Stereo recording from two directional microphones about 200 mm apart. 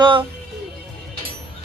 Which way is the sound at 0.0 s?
25° right (ahead or behind).